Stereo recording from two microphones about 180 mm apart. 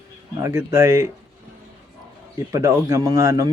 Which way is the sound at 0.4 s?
15° right (ahead or behind).